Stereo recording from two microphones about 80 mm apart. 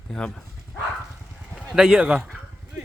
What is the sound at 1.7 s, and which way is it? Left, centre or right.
Speech, centre.